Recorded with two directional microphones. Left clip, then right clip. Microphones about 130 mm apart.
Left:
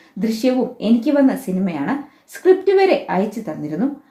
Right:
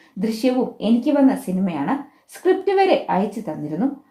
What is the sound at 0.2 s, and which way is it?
Speech, 25° right (ahead or behind).